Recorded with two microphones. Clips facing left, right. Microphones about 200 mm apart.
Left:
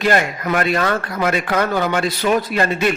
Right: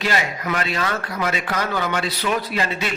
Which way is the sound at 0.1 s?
50° left (ahead or behind).